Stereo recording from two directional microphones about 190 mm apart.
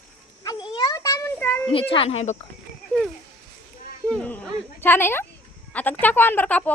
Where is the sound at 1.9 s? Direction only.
30° left (ahead or behind).